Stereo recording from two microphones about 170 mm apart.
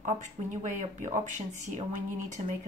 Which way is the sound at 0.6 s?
45° right (ahead or behind).